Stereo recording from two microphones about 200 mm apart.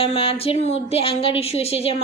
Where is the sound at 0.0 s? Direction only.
30° left (ahead or behind).